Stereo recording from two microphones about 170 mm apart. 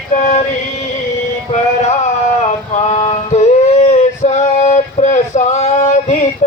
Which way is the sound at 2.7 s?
40° left (ahead or behind).